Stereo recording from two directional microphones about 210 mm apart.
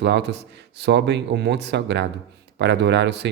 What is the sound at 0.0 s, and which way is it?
Speech, 55° right (ahead or behind).